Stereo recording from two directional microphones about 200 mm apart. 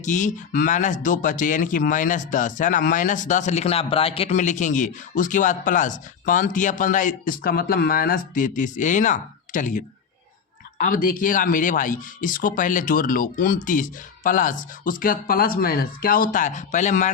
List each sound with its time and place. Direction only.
0.0 s speech: 40° left (ahead or behind)